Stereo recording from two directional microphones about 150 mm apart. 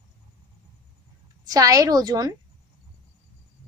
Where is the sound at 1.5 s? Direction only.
25° right (ahead or behind).